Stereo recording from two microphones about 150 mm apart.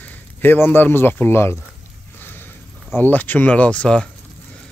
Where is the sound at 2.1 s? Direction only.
15° left (ahead or behind).